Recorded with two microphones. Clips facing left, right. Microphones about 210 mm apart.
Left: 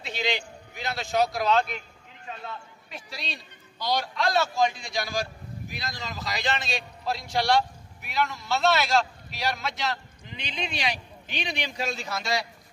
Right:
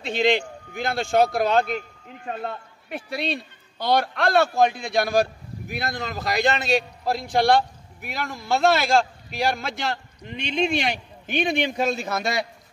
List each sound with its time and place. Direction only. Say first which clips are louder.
0.0 s a man's voice: right 9 dB; 50° right (ahead or behind)